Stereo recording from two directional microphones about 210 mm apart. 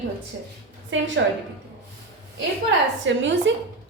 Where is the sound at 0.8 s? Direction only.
65° right (ahead or behind).